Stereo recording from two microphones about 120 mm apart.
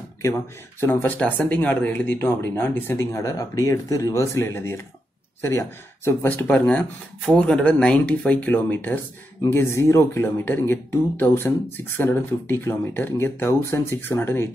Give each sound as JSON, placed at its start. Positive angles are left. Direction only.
{"t": 0.2, "sound": "speech", "side_deg": 20}